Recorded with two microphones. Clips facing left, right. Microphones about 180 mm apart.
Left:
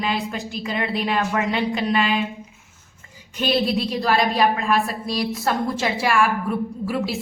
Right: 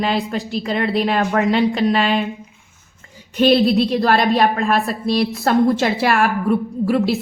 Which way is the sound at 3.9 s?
60° right (ahead or behind).